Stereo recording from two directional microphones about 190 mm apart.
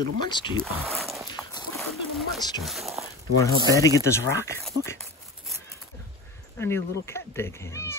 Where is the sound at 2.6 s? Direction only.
Centre (ahead or behind).